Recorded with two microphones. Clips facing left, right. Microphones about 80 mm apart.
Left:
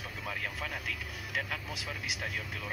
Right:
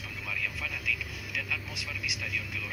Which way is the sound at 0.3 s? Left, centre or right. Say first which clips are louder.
Right 1 dB; left.